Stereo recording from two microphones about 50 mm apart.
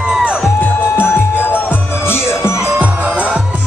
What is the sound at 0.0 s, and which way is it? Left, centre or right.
Music, centre.